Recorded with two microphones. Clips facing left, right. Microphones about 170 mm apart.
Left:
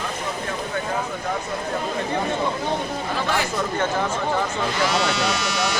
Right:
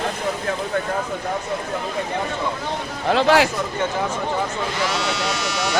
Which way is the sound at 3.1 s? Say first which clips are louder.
Right 11 dB; 90° right.